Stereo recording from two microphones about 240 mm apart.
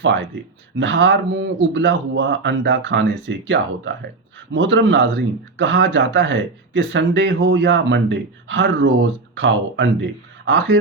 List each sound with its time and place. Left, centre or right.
0.8 s speech: right